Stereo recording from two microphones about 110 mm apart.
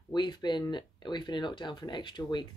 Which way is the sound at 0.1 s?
40° left (ahead or behind).